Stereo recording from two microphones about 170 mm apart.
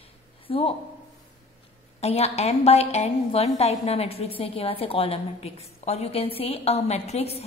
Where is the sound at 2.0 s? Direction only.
40° left (ahead or behind).